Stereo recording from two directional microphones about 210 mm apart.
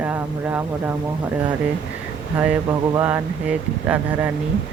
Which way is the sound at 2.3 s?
10° right (ahead or behind).